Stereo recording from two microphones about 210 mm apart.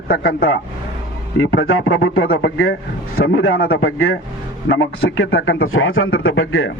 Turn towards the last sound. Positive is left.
turn(degrees=75)  # may be behind; listen again after turning